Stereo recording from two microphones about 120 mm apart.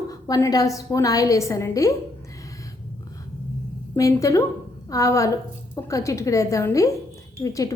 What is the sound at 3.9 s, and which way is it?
A woman's voice, 25° left (ahead or behind).